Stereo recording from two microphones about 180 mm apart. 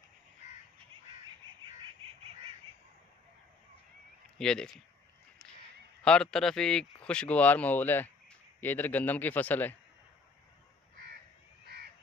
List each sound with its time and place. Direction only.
1.5 s frog: 25° right (ahead or behind)
4.4 s speech: 5° left (ahead or behind)
6.0 s a man's voice: 5° left (ahead or behind)
11.6 s crow: 65° right (ahead or behind)